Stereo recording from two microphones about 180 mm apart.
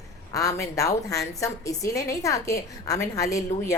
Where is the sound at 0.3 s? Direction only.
20° left (ahead or behind).